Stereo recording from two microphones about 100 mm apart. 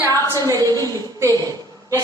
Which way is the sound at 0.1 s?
35° right (ahead or behind).